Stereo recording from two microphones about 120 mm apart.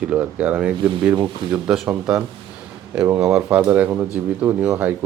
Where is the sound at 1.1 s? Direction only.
35° right (ahead or behind).